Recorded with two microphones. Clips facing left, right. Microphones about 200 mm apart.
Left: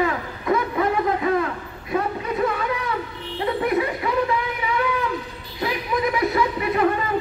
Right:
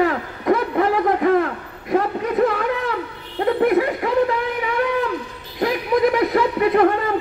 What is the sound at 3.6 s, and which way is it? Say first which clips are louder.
Snicker: right 6 dB; 55° right (ahead or behind).